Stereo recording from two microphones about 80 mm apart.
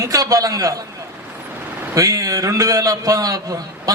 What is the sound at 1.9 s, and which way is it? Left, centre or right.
A man's voice, right.